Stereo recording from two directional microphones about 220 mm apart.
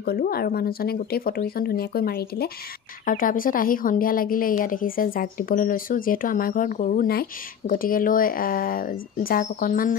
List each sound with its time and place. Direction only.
0.0 s a woman's voice: 45° left (ahead or behind)